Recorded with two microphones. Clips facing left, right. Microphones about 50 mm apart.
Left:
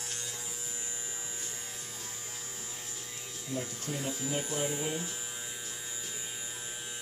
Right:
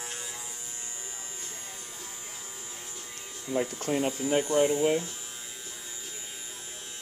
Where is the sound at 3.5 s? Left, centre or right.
Right.